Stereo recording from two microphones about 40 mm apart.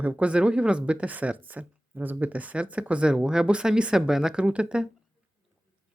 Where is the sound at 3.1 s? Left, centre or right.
Centre.